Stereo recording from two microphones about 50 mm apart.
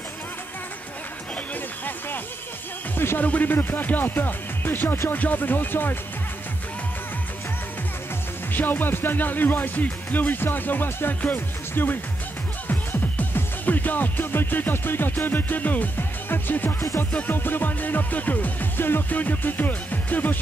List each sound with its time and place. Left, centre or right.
3.2 s speech: left
8.5 s speech: left
12.6 s music: left
17.3 s speech: left